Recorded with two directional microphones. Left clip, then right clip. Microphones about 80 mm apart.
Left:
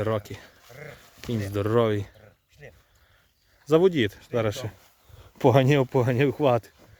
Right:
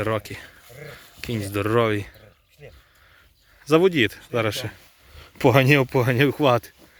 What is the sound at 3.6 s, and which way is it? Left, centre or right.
Speech, left.